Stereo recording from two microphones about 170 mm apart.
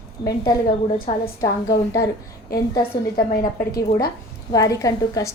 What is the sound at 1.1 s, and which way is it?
Speech, 45° left (ahead or behind).